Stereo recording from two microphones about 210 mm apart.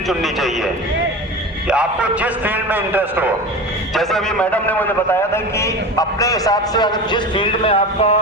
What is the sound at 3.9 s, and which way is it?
A man's voice, 5° left (ahead or behind).